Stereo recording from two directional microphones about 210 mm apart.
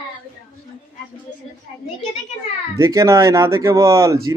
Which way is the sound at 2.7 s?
15° right (ahead or behind).